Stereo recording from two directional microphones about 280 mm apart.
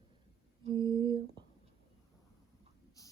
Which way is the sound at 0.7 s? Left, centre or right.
Centre.